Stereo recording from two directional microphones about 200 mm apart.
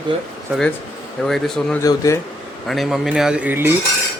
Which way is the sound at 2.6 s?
Centre (ahead or behind).